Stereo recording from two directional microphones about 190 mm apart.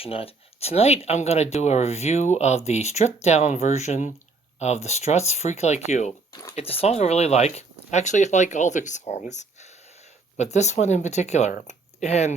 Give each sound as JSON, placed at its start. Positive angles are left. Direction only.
{"t": 0.0, "sound": "speech", "side_deg": 30}